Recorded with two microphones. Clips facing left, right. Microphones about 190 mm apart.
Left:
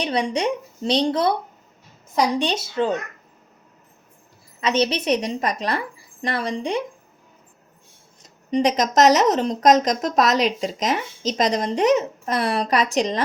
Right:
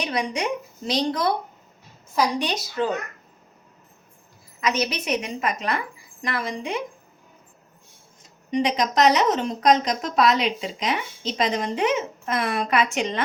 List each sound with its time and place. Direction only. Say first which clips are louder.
0.0 s a woman's voice: left 4 dB; 30° left (ahead or behind)
4.6 s a woman's voice: left 4 dB; 30° left (ahead or behind)
8.4 s a woman's voice: left 3 dB; 40° left (ahead or behind)